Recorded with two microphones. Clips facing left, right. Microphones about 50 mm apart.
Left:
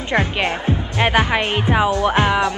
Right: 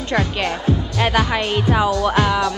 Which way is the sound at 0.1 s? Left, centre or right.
Left.